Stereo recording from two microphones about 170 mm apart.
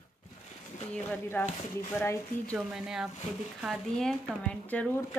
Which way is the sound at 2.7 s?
5° right (ahead or behind).